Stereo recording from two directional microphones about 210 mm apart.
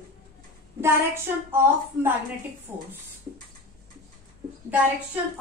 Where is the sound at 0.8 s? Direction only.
10° right (ahead or behind).